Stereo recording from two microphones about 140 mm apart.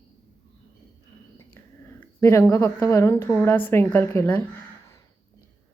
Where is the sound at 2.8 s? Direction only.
20° left (ahead or behind).